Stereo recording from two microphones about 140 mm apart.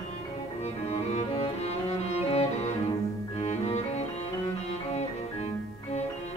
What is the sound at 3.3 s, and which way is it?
Cello, 50° left (ahead or behind).